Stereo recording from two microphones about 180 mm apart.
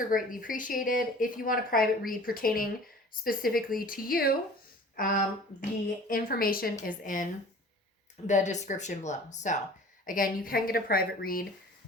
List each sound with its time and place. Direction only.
0.1 s a woman's voice: 50° left (ahead or behind)
8.3 s a woman's voice: 40° left (ahead or behind)